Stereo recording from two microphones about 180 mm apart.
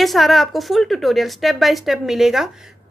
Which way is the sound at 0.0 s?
Centre (ahead or behind).